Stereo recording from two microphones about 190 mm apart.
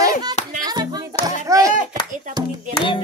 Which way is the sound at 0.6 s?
20° right (ahead or behind).